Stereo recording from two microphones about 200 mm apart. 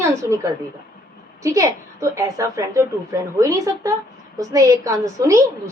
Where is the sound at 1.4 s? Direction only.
15° right (ahead or behind).